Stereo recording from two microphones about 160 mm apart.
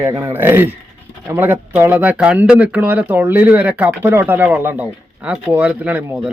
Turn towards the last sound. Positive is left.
turn(degrees=-10)  # may be behind; listen again after turning